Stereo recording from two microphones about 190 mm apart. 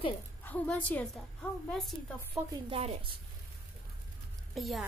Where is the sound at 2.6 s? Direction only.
30° right (ahead or behind).